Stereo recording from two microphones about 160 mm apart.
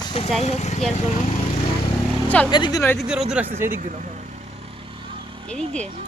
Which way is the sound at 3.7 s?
50° right (ahead or behind).